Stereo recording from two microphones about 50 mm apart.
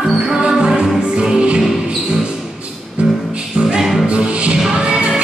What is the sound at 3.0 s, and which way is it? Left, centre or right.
Music, centre.